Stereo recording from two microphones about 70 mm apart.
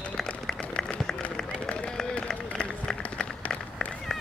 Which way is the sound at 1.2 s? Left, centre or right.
Centre.